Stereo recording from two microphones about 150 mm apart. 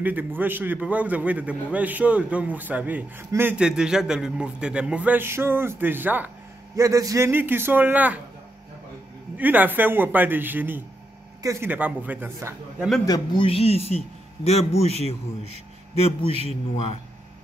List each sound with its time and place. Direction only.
0.0 s a man's voice: 10° right (ahead or behind)
6.8 s a man's voice: 20° right (ahead or behind)
9.4 s a man's voice: 10° right (ahead or behind)
13.0 s a man's voice: 25° left (ahead or behind); by 16.2 s 45° left (ahead or behind)
16.3 s a man's voice: 45° right (ahead or behind)
16.7 s a man's voice: 45° left (ahead or behind)